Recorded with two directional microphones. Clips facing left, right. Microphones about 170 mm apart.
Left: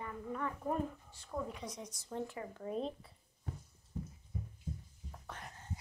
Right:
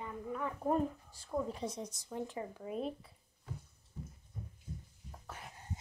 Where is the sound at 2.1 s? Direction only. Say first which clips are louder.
Right 1 dB; 20° right (ahead or behind).